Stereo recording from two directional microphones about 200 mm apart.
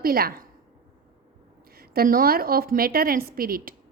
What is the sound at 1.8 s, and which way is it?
A woman's voice, 45° right (ahead or behind).